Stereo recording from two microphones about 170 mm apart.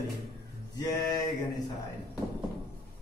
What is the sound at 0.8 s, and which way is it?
Male singing, 25° left (ahead or behind).